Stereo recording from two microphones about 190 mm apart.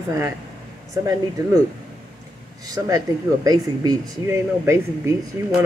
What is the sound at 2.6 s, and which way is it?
Speech, 20° right (ahead or behind).